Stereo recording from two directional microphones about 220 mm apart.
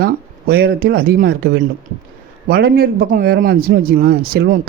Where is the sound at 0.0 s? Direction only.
45° right (ahead or behind).